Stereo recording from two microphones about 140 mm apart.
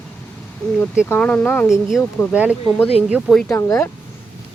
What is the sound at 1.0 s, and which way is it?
Speech, 10° left (ahead or behind).